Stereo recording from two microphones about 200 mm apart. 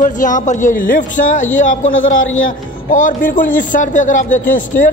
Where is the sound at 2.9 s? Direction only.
40° left (ahead or behind).